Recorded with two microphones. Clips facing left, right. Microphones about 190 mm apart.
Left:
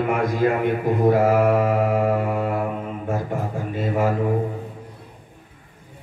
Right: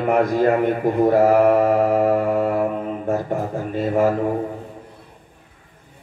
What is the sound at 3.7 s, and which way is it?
Mantra, 45° right (ahead or behind).